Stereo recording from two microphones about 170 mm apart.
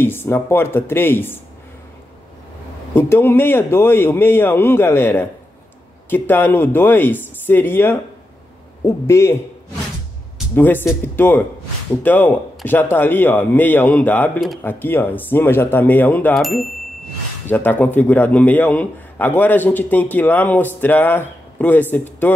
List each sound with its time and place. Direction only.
0.0 s a man's voice: 15° left (ahead or behind)
2.9 s a man's voice: 10° left (ahead or behind)
10.5 s a man's voice: 10° left (ahead or behind)